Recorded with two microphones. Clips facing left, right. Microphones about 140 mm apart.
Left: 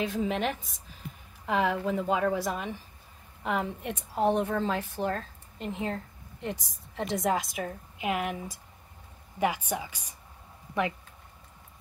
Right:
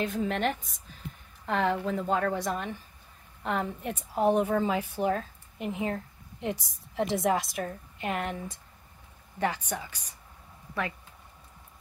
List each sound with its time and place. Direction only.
0.0 s a woman's voice: centre (ahead or behind); by 10.9 s 15° left (ahead or behind)